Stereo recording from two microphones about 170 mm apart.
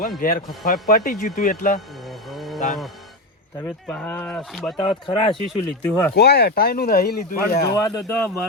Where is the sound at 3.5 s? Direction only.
15° left (ahead or behind).